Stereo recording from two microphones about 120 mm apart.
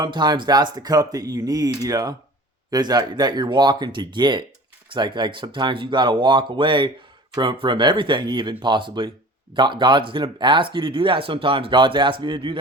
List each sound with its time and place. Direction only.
0.0 s speech: 35° right (ahead or behind)